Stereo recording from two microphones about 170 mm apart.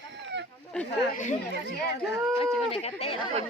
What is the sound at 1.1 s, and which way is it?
Speech, 45° left (ahead or behind).